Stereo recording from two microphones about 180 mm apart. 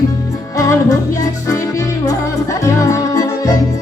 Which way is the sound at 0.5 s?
20° left (ahead or behind).